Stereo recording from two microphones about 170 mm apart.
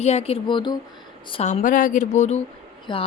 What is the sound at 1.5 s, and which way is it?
Speech, 50° left (ahead or behind).